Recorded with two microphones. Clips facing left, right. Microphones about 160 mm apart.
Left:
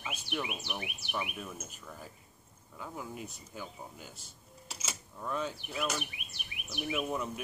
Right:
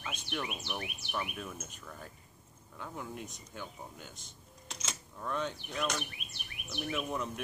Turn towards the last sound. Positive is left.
turn(degrees=5)  # may be behind; listen again after turning